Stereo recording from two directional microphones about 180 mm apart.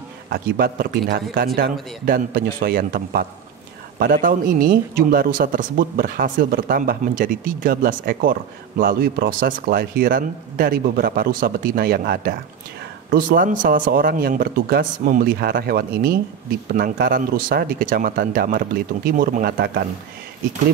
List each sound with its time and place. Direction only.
0.3 s speech: 55° right (ahead or behind)